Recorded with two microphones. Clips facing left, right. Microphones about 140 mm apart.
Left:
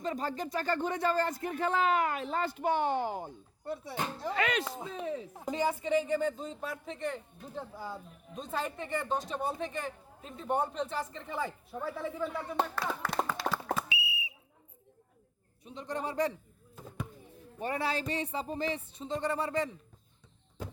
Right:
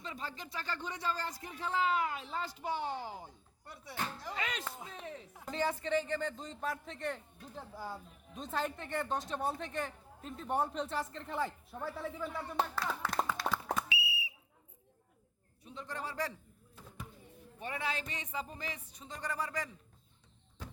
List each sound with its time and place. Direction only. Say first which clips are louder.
0.0 s speech: left 10 dB; 45° left (ahead or behind)
3.7 s speech: left 6 dB; 25° left (ahead or behind)
4.3 s speech: left 9 dB; 70° left (ahead or behind)
5.5 s speech: left 4 dB; 10° left (ahead or behind)
8.4 s speech: left 2 dB; centre (ahead or behind)
13.1 s a sound: left 1 dB; centre (ahead or behind)
13.8 s whistle: left 1 dB; 20° left (ahead or behind)
15.6 s speech: left 6 dB; 20° left (ahead or behind)
17.6 s speech: left 6 dB; 40° left (ahead or behind)